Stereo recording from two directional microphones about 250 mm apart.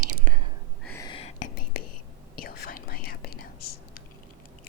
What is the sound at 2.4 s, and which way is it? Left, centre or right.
Whispering, left.